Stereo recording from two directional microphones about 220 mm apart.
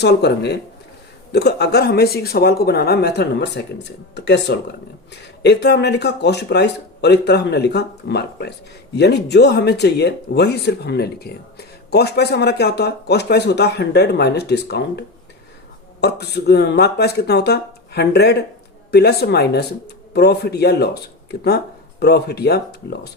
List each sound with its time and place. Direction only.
0.0 s speech: 50° left (ahead or behind)
16.0 s speech: 50° left (ahead or behind)